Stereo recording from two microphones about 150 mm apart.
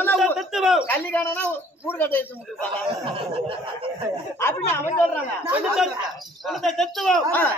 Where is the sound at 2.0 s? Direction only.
10° left (ahead or behind).